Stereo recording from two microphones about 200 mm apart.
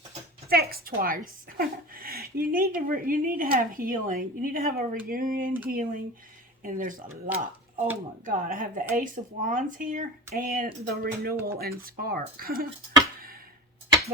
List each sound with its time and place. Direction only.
0.5 s a woman's voice: 50° right (ahead or behind)
7.3 s speech: 10° right (ahead or behind)
8.2 s a woman's voice: 45° right (ahead or behind)